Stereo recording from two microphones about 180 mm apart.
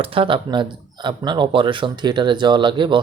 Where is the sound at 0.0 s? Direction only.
30° right (ahead or behind).